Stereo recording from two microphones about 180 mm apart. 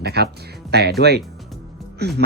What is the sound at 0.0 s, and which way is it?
Speech, 65° right (ahead or behind).